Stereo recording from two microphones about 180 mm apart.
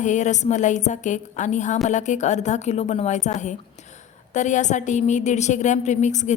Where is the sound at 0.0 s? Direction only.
40° left (ahead or behind).